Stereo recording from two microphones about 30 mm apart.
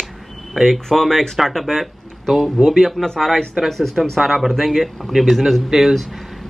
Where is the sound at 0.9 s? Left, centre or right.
Centre.